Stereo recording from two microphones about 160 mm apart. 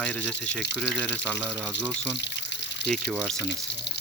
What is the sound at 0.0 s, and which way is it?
Speech, 5° left (ahead or behind).